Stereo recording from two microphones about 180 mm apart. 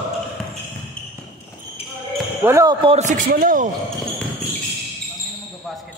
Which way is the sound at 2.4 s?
20° right (ahead or behind).